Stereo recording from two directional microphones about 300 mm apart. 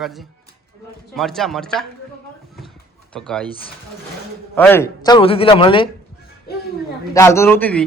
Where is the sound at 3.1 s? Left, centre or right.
Centre.